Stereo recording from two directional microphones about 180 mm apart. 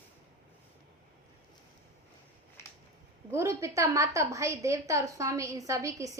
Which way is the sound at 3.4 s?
15° right (ahead or behind).